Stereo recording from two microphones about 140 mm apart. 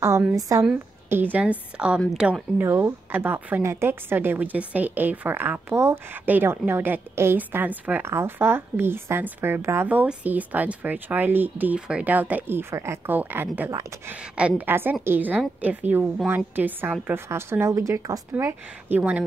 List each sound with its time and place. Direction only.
0.4 s a woman's voice: 25° right (ahead or behind)
1.1 s a woman's voice: 15° right (ahead or behind)